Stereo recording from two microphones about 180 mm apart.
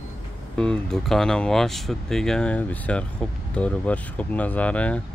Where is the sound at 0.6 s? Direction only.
5° left (ahead or behind).